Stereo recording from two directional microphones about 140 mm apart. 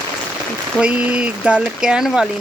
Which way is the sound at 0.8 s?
10° right (ahead or behind).